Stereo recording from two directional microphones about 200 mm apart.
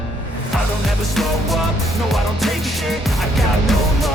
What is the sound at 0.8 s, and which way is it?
Music, centre (ahead or behind).